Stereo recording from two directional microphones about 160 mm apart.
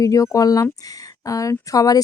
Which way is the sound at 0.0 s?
20° left (ahead or behind).